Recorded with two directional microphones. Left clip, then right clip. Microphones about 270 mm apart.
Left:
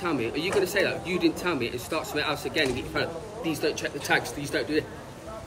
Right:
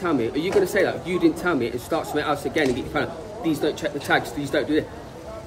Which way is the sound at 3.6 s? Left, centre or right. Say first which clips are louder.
Right 1 dB; right.